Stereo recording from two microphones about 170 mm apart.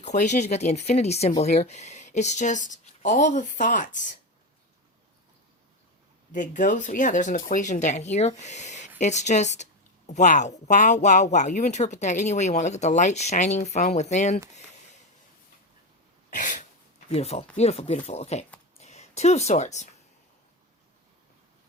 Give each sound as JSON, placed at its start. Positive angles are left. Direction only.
{"t": 0.0, "sound": "speech", "side_deg": 45}
{"t": 6.3, "sound": "speech", "side_deg": 50}
{"t": 16.3, "sound": "throat clearing", "side_deg": 50}
{"t": 17.1, "sound": "a woman's voice", "side_deg": 40}